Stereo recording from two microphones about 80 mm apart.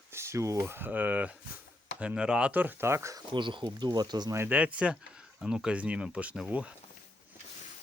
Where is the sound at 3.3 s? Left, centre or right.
Right.